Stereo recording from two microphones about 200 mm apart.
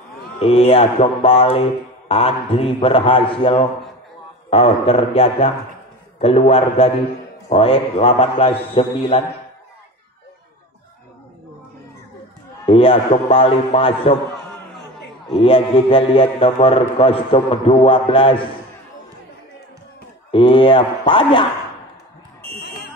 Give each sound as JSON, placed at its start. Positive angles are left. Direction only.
{"t": 0.4, "sound": "speech", "side_deg": 30}
{"t": 12.6, "sound": "a sound", "side_deg": 25}
{"t": 13.1, "sound": "speech", "side_deg": 30}
{"t": 15.4, "sound": "speech", "side_deg": 25}
{"t": 20.2, "sound": "speech", "side_deg": 25}